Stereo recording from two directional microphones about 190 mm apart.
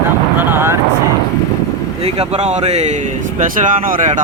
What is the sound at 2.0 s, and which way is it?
Speech, 35° right (ahead or behind).